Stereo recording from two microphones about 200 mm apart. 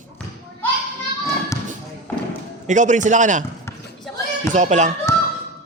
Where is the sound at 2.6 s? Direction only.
35° right (ahead or behind).